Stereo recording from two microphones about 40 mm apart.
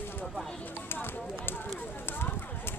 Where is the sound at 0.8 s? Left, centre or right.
Left.